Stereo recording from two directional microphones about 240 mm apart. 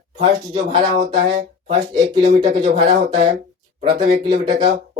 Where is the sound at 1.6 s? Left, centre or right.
Right.